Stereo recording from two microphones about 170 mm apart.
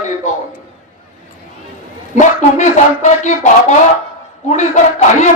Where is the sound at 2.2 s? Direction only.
45° left (ahead or behind).